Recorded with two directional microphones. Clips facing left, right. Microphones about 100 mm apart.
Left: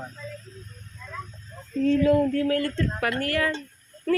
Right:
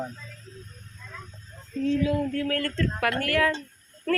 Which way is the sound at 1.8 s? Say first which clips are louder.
Left 5 dB; 50° left (ahead or behind).